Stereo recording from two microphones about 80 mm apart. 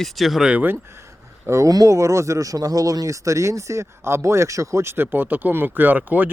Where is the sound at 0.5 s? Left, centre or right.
Right.